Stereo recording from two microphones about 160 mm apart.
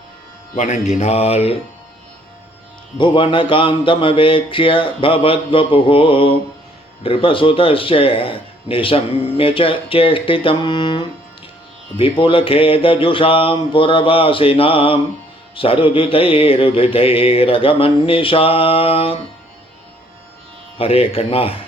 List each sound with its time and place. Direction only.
0.5 s speech: 45° left (ahead or behind)
3.0 s mantra: 30° left (ahead or behind)
20.7 s mantra: 35° left (ahead or behind)